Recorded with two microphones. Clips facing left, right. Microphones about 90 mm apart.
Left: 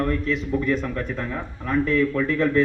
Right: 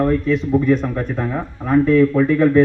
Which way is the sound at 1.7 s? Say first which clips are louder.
Right 8 dB; 15° right (ahead or behind).